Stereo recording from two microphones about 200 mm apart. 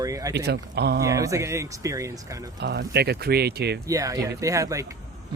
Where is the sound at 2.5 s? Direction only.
55° right (ahead or behind).